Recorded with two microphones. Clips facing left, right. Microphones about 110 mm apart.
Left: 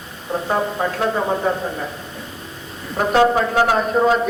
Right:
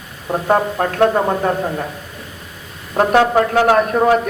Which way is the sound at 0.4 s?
65° right (ahead or behind).